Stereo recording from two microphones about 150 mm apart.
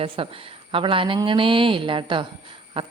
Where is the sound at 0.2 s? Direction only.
35° right (ahead or behind).